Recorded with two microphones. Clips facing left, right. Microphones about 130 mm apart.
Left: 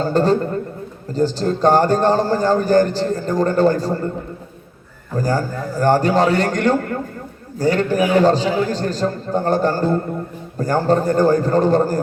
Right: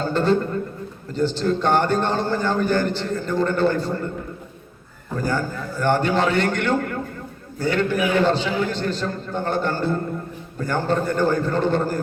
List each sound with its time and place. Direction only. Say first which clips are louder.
0.0 s a man's voice: left 3 dB; 40° left (ahead or behind)
5.1 s a man's voice: left 4 dB; 40° left (ahead or behind)